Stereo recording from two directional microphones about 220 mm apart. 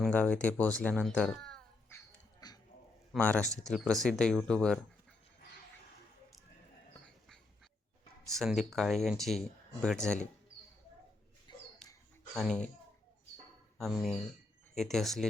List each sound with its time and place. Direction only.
0.0 s a sound: 5° left (ahead or behind)
3.2 s speech: 5° left (ahead or behind)
8.3 s speech: centre (ahead or behind)
11.5 s a sound: 20° left (ahead or behind)
12.3 s speech: centre (ahead or behind)
13.7 s speech: centre (ahead or behind)